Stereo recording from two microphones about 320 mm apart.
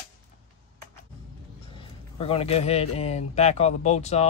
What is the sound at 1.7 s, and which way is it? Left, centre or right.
Speech, centre.